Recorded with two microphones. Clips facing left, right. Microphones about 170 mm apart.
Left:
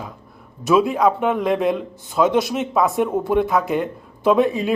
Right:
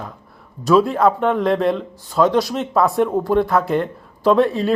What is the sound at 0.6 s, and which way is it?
Speech, 20° left (ahead or behind).